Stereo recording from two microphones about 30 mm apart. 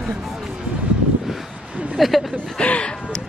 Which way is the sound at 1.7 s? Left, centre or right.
Right.